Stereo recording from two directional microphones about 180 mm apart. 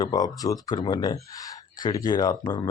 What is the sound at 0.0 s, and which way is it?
Speech, 20° left (ahead or behind).